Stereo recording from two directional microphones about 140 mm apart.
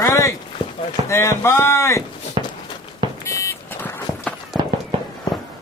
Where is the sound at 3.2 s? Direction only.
20° left (ahead or behind).